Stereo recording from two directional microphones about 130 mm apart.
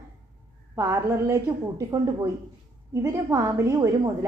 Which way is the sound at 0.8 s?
20° right (ahead or behind).